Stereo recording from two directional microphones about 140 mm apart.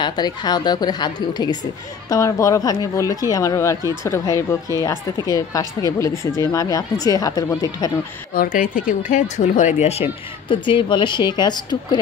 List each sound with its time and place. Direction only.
0.0 s speech: 30° left (ahead or behind)
8.4 s speech: 70° left (ahead or behind); by 10.0 s 50° left (ahead or behind)
10.5 s a woman's voice: 35° left (ahead or behind)